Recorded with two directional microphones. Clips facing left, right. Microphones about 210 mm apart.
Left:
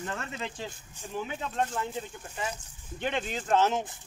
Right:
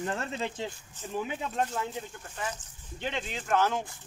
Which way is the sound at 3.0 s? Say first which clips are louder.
Left 3 dB; 55° left (ahead or behind).